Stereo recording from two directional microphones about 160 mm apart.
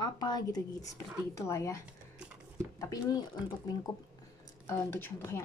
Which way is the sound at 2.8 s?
25° left (ahead or behind).